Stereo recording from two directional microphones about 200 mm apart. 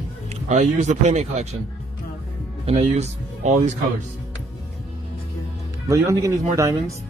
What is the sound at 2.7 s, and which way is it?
Speech, 35° right (ahead or behind).